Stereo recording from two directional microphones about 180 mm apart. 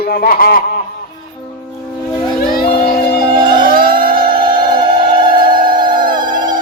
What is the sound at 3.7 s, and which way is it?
Music, 55° right (ahead or behind).